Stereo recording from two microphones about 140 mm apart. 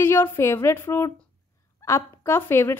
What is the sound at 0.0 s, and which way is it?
A woman's voice, 15° left (ahead or behind).